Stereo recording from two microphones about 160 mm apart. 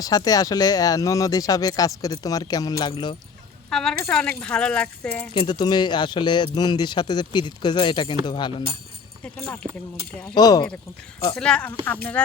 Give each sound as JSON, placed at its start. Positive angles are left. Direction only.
{"t": 0.0, "sound": "speech", "side_deg": 25}
{"t": 3.7, "sound": "a woman's voice", "side_deg": 5}
{"t": 5.3, "sound": "speech", "side_deg": 30}
{"t": 10.3, "sound": "speech", "side_deg": 25}
{"t": 11.3, "sound": "speech", "side_deg": 5}